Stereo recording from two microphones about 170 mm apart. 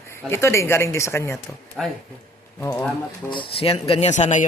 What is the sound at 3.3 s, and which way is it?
Speech, 30° left (ahead or behind).